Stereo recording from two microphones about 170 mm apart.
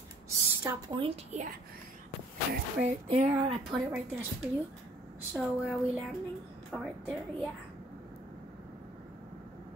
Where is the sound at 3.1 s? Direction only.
40° right (ahead or behind).